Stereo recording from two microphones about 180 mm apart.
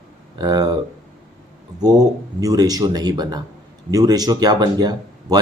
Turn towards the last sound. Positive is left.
turn(degrees=-20)  # may be behind; listen again after turning